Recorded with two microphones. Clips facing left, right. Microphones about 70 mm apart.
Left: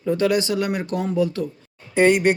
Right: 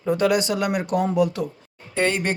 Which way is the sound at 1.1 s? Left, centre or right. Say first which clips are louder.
Left 2 dB; right.